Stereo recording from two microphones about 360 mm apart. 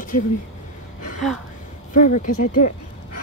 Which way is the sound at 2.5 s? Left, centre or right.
Left.